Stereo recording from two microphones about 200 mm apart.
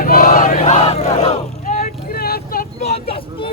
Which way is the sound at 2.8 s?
30° left (ahead or behind).